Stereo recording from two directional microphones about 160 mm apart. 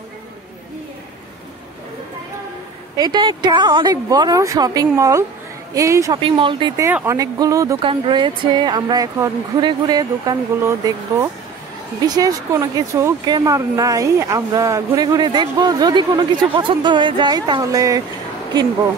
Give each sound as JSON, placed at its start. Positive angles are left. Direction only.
{"t": 3.0, "sound": "speech", "side_deg": -30}
{"t": 6.1, "sound": "speech", "side_deg": -30}
{"t": 6.8, "sound": "speech", "side_deg": -15}
{"t": 7.8, "sound": "speech", "side_deg": -30}
{"t": 12.1, "sound": "speech", "side_deg": -25}